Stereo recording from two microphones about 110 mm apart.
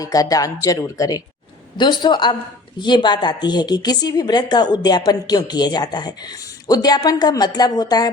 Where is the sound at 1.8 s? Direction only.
45° left (ahead or behind).